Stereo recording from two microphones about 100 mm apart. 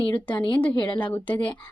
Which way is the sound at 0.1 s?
15° left (ahead or behind).